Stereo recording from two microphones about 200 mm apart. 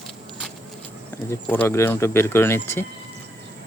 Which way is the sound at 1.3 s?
10° left (ahead or behind).